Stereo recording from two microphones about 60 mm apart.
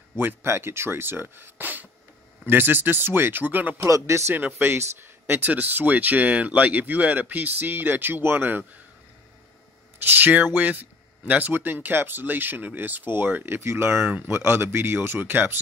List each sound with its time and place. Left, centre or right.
0.2 s speech: right
3.7 s speech: right
4.6 s speech: right
10.0 s speech: right